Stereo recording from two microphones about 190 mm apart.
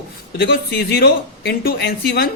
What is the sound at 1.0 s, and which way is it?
Speech, 60° left (ahead or behind).